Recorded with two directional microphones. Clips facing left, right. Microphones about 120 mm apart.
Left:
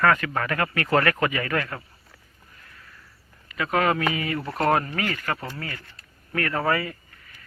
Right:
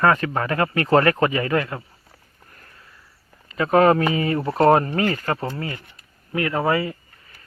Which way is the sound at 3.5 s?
35° right (ahead or behind).